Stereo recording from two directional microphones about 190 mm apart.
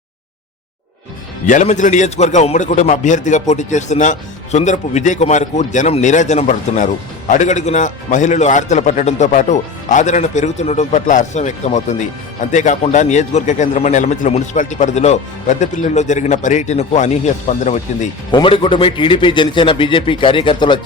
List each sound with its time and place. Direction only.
1.5 s a man's voice: 40° left (ahead or behind)
18.3 s a man's voice: 25° left (ahead or behind)